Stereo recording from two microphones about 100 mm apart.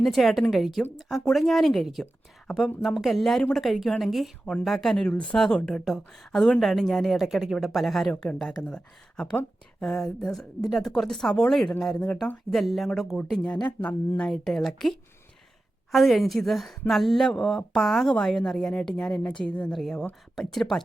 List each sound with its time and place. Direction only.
0.0 s speech: centre (ahead or behind)
13.8 s speech: 35° left (ahead or behind)
14.2 s speech: 5° left (ahead or behind)